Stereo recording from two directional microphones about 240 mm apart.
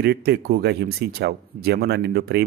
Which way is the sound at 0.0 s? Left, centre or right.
Right.